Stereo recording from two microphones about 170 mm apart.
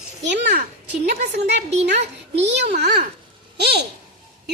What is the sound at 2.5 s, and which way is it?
Speech, 80° right.